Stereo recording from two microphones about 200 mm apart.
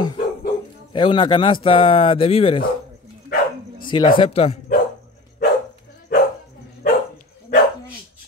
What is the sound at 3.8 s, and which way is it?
Speech, 20° left (ahead or behind).